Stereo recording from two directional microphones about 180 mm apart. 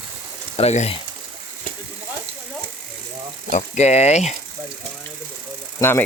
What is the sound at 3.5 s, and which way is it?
Speech, 40° left (ahead or behind).